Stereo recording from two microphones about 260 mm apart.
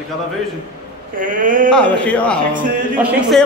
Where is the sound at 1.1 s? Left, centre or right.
Right.